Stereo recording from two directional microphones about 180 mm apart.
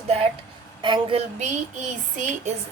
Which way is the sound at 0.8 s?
25° right (ahead or behind).